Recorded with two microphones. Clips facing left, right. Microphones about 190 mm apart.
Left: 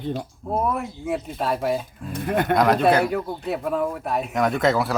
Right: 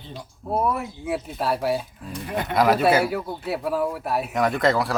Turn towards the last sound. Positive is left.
turn(degrees=0)  # may be behind; listen again after turning